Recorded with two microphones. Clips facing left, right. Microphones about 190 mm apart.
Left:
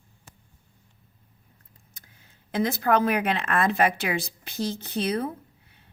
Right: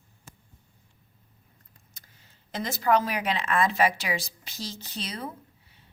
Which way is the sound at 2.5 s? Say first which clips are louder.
Left 2 dB; 55° left (ahead or behind).